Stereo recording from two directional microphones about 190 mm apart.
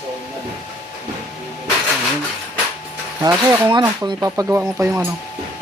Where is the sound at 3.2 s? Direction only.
20° right (ahead or behind).